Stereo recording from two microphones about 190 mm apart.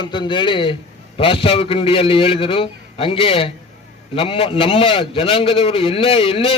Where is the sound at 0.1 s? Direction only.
25° left (ahead or behind).